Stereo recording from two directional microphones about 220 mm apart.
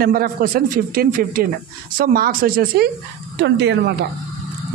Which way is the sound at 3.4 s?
50° right (ahead or behind).